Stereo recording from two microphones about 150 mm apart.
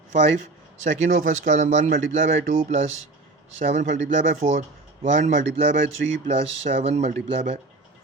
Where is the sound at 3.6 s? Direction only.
65° right (ahead or behind); by 7.6 s 45° right (ahead or behind).